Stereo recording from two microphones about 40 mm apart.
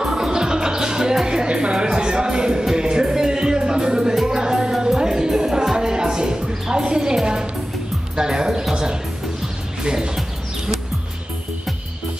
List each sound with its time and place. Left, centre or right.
0.0 s music: centre
8.2 s speech: centre
9.8 s speech: centre